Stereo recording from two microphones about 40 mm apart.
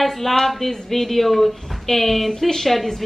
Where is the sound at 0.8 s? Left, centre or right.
Centre.